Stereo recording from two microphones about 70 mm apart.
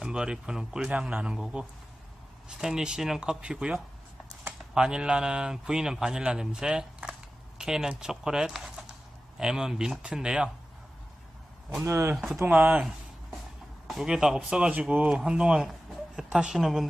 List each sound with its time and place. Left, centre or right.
0.0 s a man's voice: centre
11.9 s speech: right
12.1 s speech: centre
12.5 s speech: right
13.8 s a man's voice: centre
15.1 s a man's voice: centre